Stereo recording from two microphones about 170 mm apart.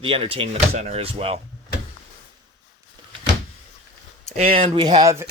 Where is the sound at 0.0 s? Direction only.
30° right (ahead or behind).